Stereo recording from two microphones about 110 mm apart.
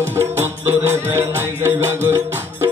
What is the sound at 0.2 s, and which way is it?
Music, 20° right (ahead or behind).